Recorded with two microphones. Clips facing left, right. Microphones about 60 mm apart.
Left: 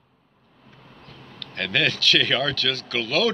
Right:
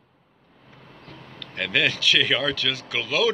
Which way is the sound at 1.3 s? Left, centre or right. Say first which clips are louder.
Even; centre.